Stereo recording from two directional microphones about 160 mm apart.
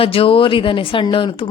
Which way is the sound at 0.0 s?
35° left (ahead or behind).